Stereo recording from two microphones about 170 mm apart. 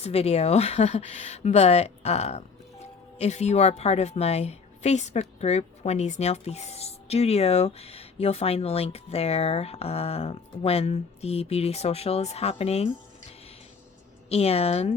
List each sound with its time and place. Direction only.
0.0 s speech: 40° left (ahead or behind)
14.3 s speech: 35° left (ahead or behind)